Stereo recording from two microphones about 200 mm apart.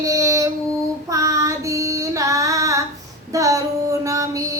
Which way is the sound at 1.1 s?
15° right (ahead or behind).